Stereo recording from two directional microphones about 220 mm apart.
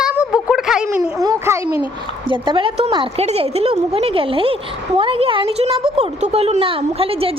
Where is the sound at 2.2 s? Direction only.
20° right (ahead or behind).